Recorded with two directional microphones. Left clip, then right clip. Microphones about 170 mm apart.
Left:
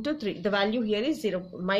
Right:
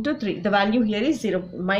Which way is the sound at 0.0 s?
35° left (ahead or behind).